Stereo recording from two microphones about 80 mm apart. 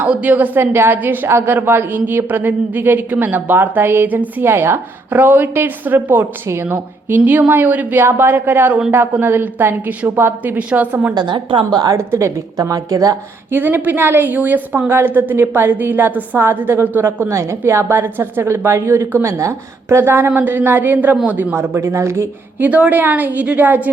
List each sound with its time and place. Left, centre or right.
0.0 s a woman's voice: centre
11.1 s a woman's voice: right
11.9 s speech: right
12.5 s speech: right
13.5 s a woman's voice: right
22.5 s a woman's voice: centre